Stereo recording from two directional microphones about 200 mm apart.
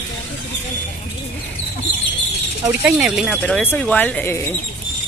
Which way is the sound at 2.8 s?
5° right (ahead or behind).